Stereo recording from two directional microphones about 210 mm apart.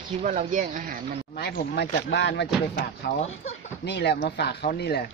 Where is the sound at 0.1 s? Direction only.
35° right (ahead or behind).